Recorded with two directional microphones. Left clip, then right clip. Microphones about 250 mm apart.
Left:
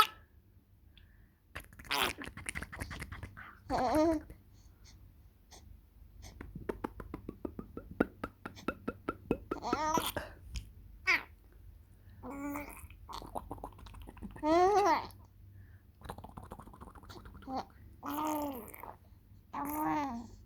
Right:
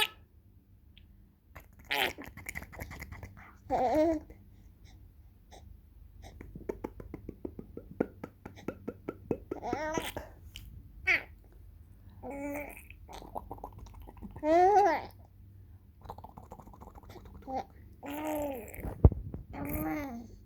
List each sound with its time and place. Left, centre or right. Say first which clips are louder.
1.5 s fart: right 2 dB; centre
4.0 s a sound: right 2 dB; centre
6.2 s beatboxing: right 1 dB; centre
12.2 s babbling: right 3 dB; centre
16.0 s gargling: right 1 dB; centre
17.5 s gargling: right 3 dB; left
18.3 s a sound: right 2 dB; centre
19.5 s babbling: left 2 dB; centre